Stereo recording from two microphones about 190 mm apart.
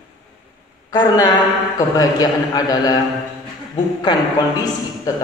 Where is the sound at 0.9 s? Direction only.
20° left (ahead or behind).